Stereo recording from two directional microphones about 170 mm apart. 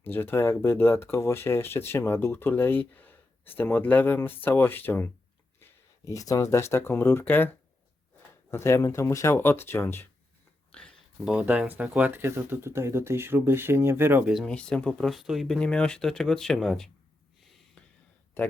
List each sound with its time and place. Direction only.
0.0 s speech: 15° left (ahead or behind)
10.7 s a sound: 5° left (ahead or behind)
11.8 s speech: 10° right (ahead or behind)
14.3 s speech: 5° left (ahead or behind)
18.4 s speech: 5° left (ahead or behind)